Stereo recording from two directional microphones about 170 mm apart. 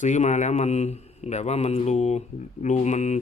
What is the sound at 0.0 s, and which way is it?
A man's voice, 45° left (ahead or behind).